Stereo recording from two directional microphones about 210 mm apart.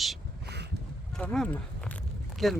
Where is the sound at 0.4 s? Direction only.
50° right (ahead or behind).